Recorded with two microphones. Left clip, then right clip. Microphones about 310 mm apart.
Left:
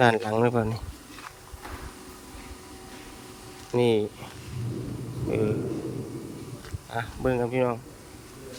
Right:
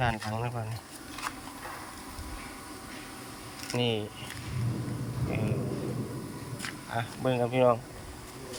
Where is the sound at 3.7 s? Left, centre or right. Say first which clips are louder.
Left 8 dB; centre.